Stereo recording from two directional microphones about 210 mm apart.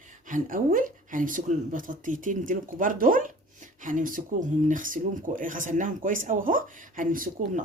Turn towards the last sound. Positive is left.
turn(degrees=-40)  # may be behind; listen again after turning